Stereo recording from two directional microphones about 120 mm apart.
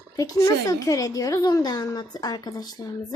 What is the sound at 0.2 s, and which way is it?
A woman's voice, 30° left (ahead or behind).